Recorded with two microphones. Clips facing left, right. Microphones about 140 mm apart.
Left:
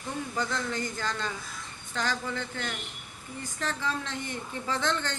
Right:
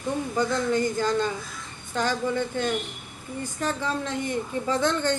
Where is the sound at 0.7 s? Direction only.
20° right (ahead or behind).